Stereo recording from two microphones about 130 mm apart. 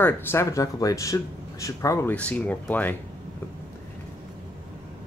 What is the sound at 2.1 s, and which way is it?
Speech, 10° left (ahead or behind).